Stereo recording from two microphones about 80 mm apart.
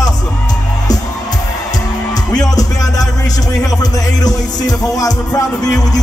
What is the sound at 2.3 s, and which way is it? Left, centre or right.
Music, left.